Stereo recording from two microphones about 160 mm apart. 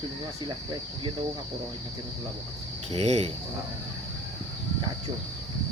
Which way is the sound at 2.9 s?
40° right (ahead or behind).